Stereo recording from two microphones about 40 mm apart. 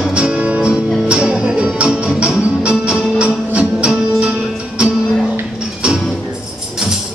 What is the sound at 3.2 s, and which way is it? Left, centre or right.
Music, right.